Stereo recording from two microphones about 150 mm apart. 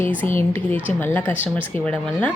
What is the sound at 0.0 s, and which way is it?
A woman's voice, 10° left (ahead or behind).